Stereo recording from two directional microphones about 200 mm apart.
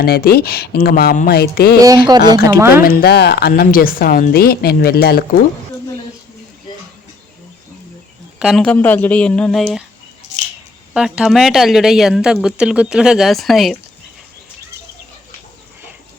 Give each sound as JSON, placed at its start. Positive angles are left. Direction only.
{"t": 0.0, "sound": "a woman's voice", "side_deg": 50}
{"t": 2.0, "sound": "speech", "side_deg": -20}
{"t": 2.8, "sound": "a woman's voice", "side_deg": 50}
{"t": 8.4, "sound": "speech", "side_deg": 0}
{"t": 10.9, "sound": "speech", "side_deg": -5}